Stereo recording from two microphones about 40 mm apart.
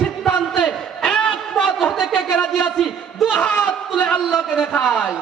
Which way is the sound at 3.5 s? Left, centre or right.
Left.